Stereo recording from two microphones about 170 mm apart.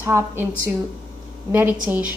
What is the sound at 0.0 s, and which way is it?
Speech, 15° right (ahead or behind).